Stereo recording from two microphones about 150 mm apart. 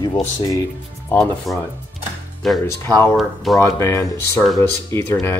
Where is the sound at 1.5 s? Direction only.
Centre (ahead or behind).